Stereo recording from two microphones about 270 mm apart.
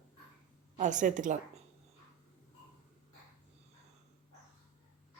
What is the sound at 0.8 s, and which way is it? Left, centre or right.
Speech, right.